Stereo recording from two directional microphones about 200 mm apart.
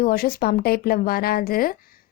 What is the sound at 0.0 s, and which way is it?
Speech, 50° left (ahead or behind).